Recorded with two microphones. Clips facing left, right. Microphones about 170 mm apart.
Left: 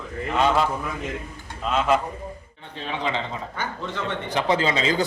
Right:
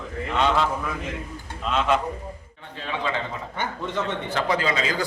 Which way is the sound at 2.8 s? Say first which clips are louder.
Left 1 dB; 20° left (ahead or behind).